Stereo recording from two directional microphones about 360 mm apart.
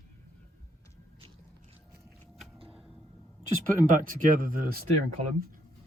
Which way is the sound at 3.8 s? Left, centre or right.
Right.